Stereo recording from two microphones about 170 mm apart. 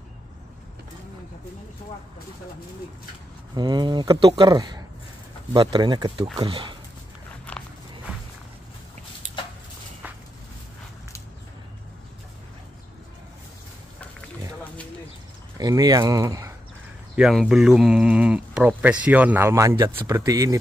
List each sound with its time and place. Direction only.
3.5 s speech: 25° right (ahead or behind)
7.5 s walk: 10° left (ahead or behind)
15.5 s speech: 20° right (ahead or behind)
17.1 s speech: 5° right (ahead or behind); by 20.5 s 20° right (ahead or behind)